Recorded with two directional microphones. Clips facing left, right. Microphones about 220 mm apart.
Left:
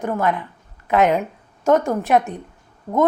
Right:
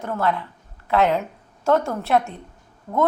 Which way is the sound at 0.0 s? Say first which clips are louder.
Left 3 dB; 15° left (ahead or behind).